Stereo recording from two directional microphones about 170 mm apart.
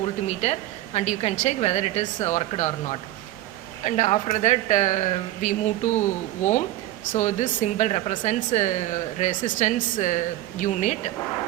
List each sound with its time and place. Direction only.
0.4 s a woman's voice: 40° left (ahead or behind)
7.1 s speech: 45° left (ahead or behind)